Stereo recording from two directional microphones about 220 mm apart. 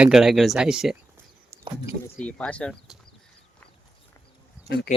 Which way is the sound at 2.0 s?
5° left (ahead or behind).